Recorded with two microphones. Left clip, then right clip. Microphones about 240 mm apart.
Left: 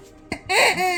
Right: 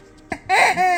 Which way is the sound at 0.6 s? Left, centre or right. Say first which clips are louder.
Right 2 dB; centre.